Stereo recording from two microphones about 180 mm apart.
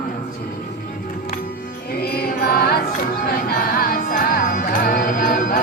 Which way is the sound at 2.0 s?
60° left (ahead or behind).